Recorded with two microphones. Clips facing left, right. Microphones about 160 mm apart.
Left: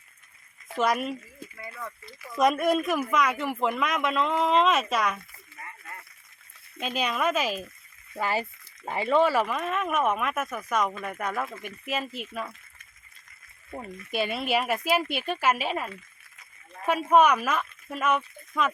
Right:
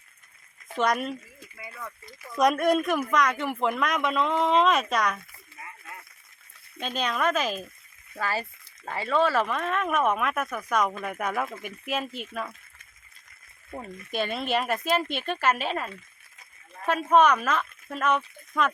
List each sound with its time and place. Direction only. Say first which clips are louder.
0.8 s speech: even; 5° left (ahead or behind)
2.3 s speech: right 1 dB; centre (ahead or behind)
5.5 s a sound: even; 5° right (ahead or behind)
6.7 s speech: even; 5° left (ahead or behind)
8.2 s speech: left 2 dB; 15° left (ahead or behind)
13.7 s speech: even; 5° left (ahead or behind)